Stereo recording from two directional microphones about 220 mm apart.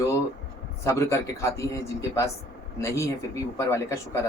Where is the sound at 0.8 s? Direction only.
15° left (ahead or behind).